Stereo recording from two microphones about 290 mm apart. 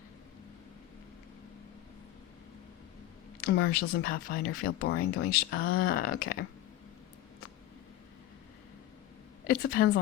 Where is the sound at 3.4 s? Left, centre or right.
Left.